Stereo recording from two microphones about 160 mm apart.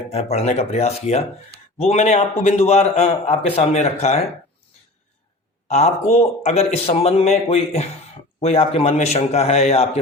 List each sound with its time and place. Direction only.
0.1 s a man's voice: 40° left (ahead or behind)
5.6 s a man's voice: 45° left (ahead or behind)